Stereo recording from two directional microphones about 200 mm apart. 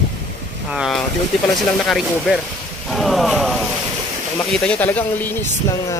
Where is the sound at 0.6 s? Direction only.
Centre (ahead or behind).